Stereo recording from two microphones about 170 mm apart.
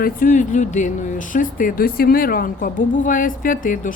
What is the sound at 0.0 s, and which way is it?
Speech, 50° left (ahead or behind).